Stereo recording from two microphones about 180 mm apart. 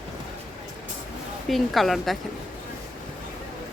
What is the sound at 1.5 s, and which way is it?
Speech, centre (ahead or behind).